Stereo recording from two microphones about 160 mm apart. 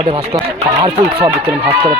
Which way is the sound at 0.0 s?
35° right (ahead or behind).